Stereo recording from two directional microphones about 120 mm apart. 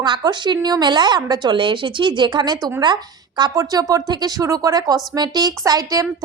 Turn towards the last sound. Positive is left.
turn(degrees=-30)  # may be behind; listen again after turning